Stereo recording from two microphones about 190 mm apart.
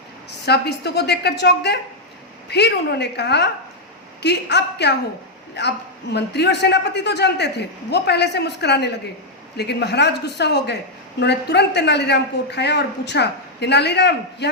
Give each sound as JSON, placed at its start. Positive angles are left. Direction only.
{"t": 0.3, "sound": "a man's voice", "side_deg": 60}